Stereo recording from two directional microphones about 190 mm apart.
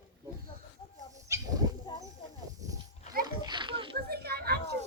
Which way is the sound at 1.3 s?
15° right (ahead or behind).